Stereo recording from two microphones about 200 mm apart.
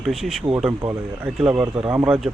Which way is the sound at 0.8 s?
10° right (ahead or behind).